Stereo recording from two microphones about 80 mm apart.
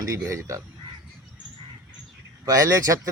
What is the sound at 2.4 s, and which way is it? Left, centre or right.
Speech, right.